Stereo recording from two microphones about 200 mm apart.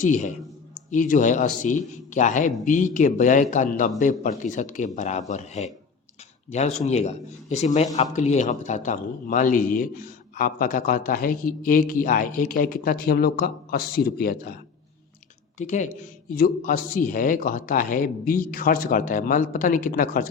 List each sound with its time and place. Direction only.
0.0 s a man's voice: 40° left (ahead or behind)
15.5 s a man's voice: 35° left (ahead or behind)